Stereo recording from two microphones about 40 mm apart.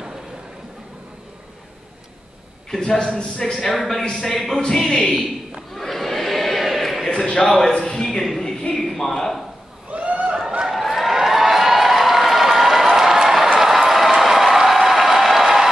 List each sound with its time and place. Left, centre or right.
2.7 s speech: centre
3.0 s a man's voice: left
3.6 s speech: centre
4.0 s a man's voice: centre
5.7 s a sound: centre
7.4 s speech: centre
7.7 s a sound: centre
9.8 s a sound: right
10.6 s crowd: centre
13.6 s applause: centre